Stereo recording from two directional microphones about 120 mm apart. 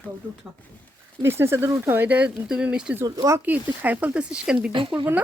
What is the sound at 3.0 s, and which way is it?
Speech, 25° right (ahead or behind).